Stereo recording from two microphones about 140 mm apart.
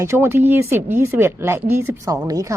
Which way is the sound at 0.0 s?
20° right (ahead or behind).